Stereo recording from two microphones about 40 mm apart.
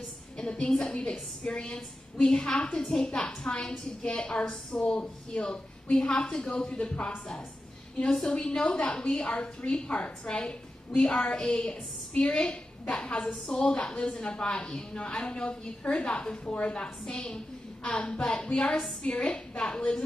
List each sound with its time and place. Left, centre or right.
0.4 s a woman's voice: left
4.4 s a woman's voice: left
8.2 s a woman's voice: centre
17.8 s a woman's voice: left